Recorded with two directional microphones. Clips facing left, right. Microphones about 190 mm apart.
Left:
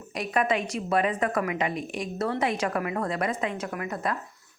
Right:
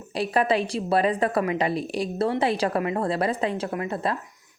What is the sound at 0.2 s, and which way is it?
A woman's voice, 35° right (ahead or behind).